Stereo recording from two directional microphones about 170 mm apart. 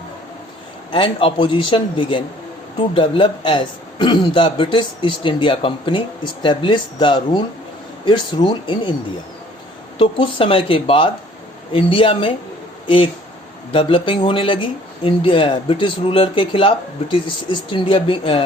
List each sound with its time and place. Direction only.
0.9 s a man's voice: 30° left (ahead or behind)
10.0 s speech: 30° left (ahead or behind)
13.7 s speech: 30° left (ahead or behind)